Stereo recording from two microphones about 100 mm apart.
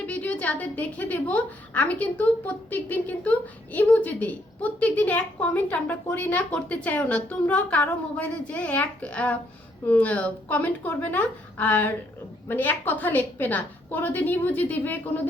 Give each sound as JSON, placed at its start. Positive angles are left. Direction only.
{"t": 0.0, "sound": "a woman's voice", "side_deg": 15}